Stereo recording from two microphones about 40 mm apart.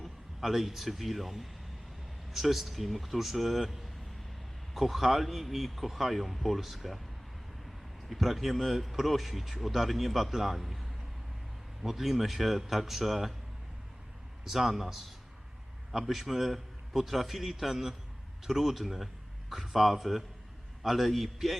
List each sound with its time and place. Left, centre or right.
0.0 s speech: centre
8.1 s speech: centre
14.4 s speech: centre